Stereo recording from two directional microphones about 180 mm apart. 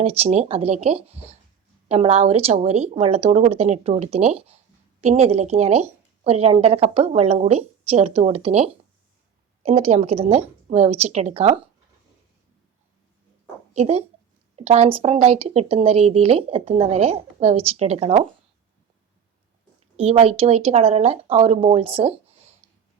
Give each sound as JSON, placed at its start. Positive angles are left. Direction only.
{"t": 0.0, "sound": "a woman's voice", "side_deg": -35}
{"t": 13.7, "sound": "a woman's voice", "side_deg": -35}
{"t": 20.0, "sound": "a woman's voice", "side_deg": -35}